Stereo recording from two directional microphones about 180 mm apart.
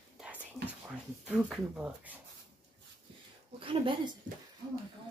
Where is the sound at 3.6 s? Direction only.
30° right (ahead or behind).